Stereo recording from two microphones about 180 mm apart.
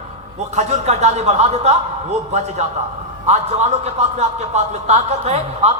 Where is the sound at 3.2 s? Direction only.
40° right (ahead or behind).